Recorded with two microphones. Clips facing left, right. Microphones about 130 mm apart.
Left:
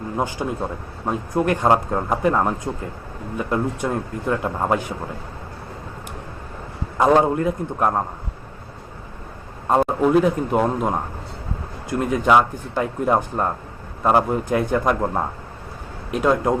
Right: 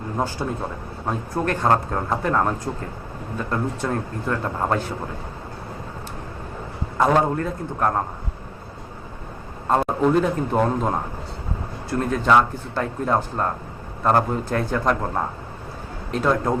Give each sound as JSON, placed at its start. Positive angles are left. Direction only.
{"t": 0.4, "sound": "speech", "side_deg": 10}
{"t": 7.0, "sound": "speech", "side_deg": 15}
{"t": 9.6, "sound": "speech", "side_deg": 10}
{"t": 16.1, "sound": "speech", "side_deg": 10}